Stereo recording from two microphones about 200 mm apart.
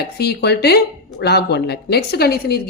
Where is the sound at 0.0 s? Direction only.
55° left (ahead or behind).